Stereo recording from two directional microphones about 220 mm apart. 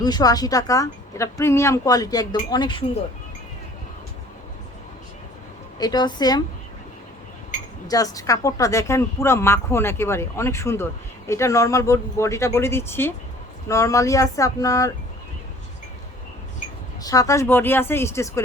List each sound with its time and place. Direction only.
0.0 s a woman's voice: 15° left (ahead or behind)
5.8 s a woman's voice: 20° left (ahead or behind)
7.9 s speech: 15° left (ahead or behind)
17.0 s speech: 15° left (ahead or behind)